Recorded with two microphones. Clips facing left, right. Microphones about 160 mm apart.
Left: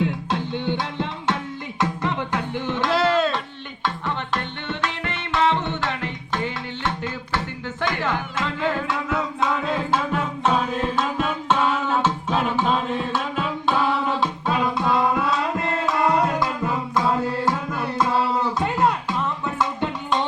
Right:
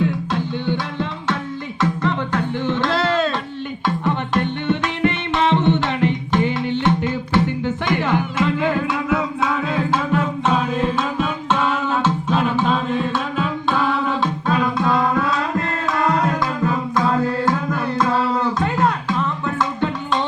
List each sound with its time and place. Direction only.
0.0 s music: 25° left (ahead or behind); by 3.3 s 5° left (ahead or behind)
3.8 s music: 15° right (ahead or behind); by 19.9 s 5° left (ahead or behind)